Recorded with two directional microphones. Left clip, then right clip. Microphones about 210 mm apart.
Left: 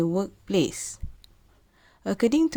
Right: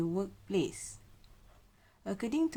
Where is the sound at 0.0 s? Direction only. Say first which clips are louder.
Left 9 dB; 35° left (ahead or behind).